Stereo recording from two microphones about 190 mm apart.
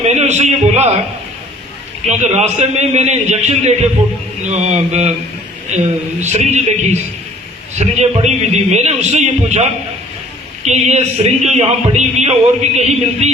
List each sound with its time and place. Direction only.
0.1 s a man's voice: 35° right (ahead or behind)
2.0 s a man's voice: 35° right (ahead or behind)
7.8 s a man's voice: 35° right (ahead or behind)